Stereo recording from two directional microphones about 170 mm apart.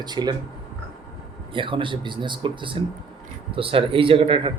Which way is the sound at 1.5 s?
30° right (ahead or behind).